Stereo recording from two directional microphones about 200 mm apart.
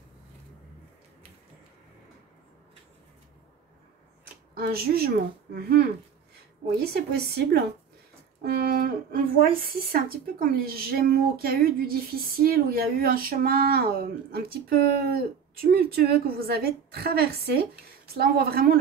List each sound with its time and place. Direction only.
4.6 s speech: 50° right (ahead or behind)